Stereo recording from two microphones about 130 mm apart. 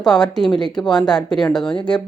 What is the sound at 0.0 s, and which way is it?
Speech, 5° left (ahead or behind).